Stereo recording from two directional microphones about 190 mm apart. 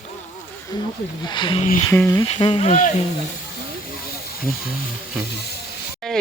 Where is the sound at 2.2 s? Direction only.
30° left (ahead or behind).